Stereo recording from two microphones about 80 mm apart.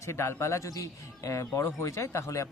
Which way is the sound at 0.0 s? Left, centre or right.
Left.